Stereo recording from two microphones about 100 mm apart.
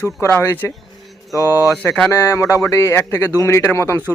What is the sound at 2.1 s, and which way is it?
Speech, 30° left (ahead or behind).